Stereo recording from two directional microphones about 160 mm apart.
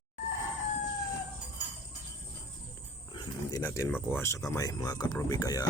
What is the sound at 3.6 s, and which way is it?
Speech, 15° left (ahead or behind).